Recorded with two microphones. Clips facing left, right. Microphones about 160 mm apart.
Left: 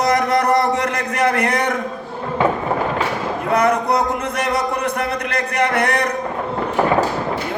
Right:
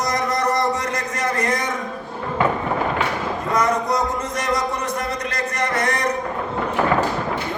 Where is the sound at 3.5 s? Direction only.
60° left (ahead or behind).